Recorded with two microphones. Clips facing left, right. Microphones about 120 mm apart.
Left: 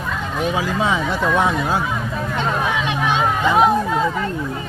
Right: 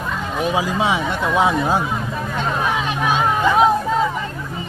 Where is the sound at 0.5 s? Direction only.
15° right (ahead or behind).